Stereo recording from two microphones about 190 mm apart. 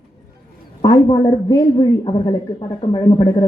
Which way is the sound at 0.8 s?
20° left (ahead or behind).